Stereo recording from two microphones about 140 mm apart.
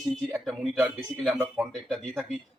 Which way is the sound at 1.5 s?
5° left (ahead or behind).